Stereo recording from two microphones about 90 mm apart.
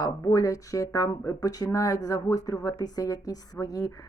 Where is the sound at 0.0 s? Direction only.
40° left (ahead or behind).